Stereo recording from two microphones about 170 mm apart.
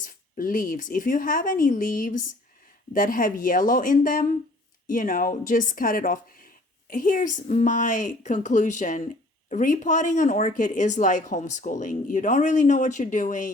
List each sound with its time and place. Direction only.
0.0 s a woman's voice: 55° left (ahead or behind)